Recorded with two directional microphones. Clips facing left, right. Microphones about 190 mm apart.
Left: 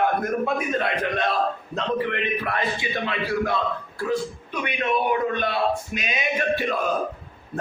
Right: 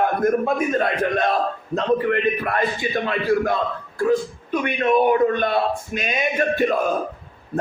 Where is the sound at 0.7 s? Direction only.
45° right (ahead or behind).